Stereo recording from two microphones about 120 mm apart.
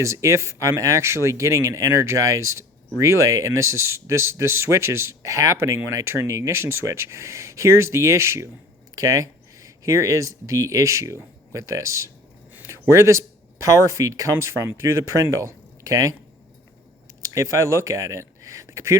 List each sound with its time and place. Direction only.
0.0 s speech: 25° right (ahead or behind)
17.2 s speech: 25° right (ahead or behind)